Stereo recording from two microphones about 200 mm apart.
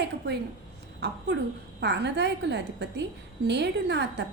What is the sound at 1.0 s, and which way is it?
A woman's voice, 60° right (ahead or behind).